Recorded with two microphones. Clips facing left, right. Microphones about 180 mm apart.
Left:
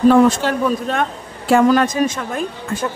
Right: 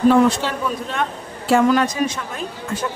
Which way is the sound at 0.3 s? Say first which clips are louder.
Left 5 dB; 50° left (ahead or behind).